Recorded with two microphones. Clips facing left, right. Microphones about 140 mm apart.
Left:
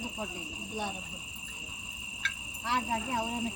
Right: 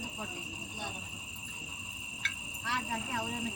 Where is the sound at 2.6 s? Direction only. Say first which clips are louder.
Left 5 dB; 30° left (ahead or behind).